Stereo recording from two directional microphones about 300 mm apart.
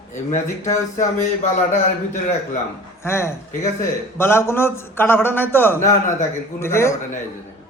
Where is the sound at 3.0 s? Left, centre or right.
Centre.